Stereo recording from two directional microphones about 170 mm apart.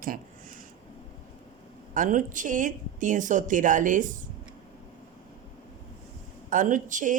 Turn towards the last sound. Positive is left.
turn(degrees=-50)  # may be behind; listen again after turning